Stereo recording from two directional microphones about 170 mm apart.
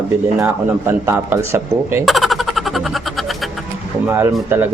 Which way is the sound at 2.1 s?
Centre (ahead or behind).